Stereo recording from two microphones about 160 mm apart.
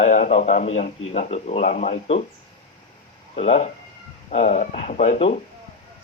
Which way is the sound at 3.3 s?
45° left (ahead or behind).